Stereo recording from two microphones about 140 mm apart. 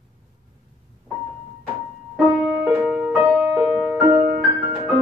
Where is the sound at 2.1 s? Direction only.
10° right (ahead or behind).